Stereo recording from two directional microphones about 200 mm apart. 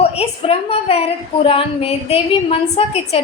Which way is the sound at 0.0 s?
30° left (ahead or behind).